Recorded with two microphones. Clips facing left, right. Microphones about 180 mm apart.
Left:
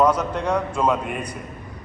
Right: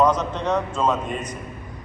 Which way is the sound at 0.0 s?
10° left (ahead or behind).